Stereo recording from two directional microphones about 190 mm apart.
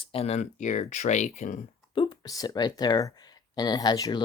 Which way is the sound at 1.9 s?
25° left (ahead or behind).